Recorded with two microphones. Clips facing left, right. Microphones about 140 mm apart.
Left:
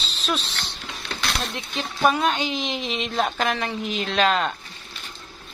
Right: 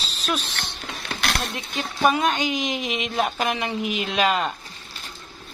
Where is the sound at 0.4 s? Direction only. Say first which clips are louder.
Right 1 dB; 50° right (ahead or behind).